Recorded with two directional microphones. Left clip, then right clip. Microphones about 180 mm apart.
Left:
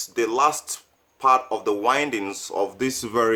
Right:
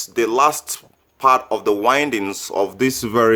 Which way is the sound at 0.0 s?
35° right (ahead or behind).